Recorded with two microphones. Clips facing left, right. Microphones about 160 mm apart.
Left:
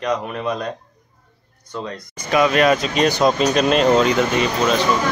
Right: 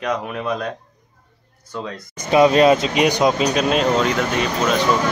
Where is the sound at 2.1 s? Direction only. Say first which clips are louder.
Right 3 dB; 25° right (ahead or behind).